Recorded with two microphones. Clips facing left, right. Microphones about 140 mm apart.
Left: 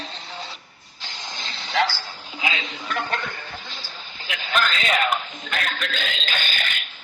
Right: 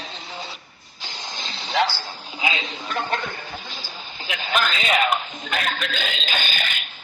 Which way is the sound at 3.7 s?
5° right (ahead or behind).